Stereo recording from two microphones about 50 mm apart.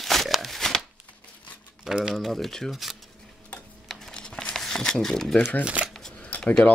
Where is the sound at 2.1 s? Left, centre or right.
Centre.